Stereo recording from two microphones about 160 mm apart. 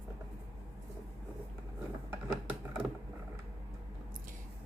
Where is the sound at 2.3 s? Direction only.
5° right (ahead or behind).